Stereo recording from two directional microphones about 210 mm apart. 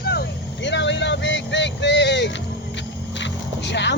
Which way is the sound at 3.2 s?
60° left (ahead or behind).